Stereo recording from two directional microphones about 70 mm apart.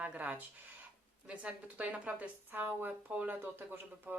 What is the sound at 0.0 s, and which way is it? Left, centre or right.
A woman's voice, right.